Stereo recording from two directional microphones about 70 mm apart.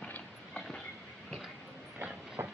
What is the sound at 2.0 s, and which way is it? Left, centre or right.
Train, right.